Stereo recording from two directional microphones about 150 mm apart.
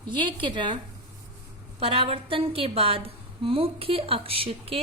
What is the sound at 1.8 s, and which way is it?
A woman's voice, 40° right (ahead or behind).